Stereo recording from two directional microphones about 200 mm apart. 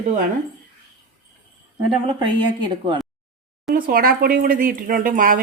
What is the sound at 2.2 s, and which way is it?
Speech, 20° right (ahead or behind).